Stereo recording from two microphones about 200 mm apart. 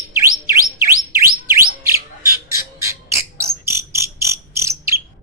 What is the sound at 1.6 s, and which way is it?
Bird, 45° right (ahead or behind).